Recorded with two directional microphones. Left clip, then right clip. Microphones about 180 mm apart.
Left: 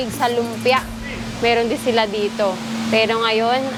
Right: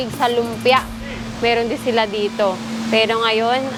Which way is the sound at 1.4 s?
25° right (ahead or behind).